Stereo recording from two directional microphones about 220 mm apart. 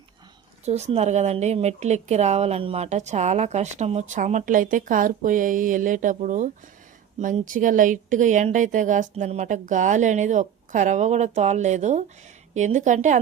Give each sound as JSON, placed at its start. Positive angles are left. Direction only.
{"t": 0.6, "sound": "speech", "side_deg": -30}